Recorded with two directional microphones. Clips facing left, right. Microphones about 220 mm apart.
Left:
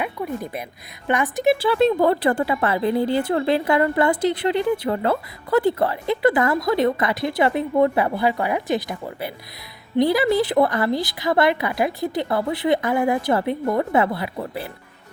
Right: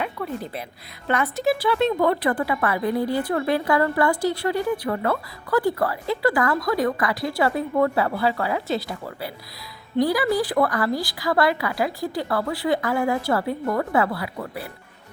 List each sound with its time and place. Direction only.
0.0 s a sound: 10° left (ahead or behind)
1.0 s a woman's voice: 15° left (ahead or behind)
1.5 s speech: 30° left (ahead or behind)